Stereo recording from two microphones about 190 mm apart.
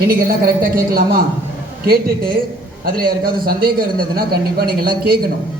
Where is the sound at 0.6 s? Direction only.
50° right (ahead or behind).